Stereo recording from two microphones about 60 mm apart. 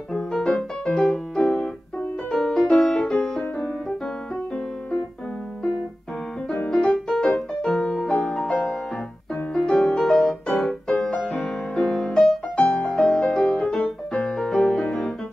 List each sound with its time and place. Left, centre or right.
0.1 s music: centre
6.7 s music: centre
12.6 s music: centre
12.9 s music: centre